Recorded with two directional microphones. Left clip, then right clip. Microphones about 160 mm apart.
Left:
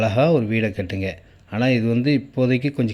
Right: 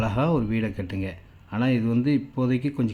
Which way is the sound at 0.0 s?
10° left (ahead or behind).